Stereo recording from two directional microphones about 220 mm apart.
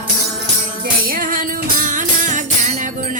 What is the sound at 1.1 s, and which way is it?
Music, 40° right (ahead or behind).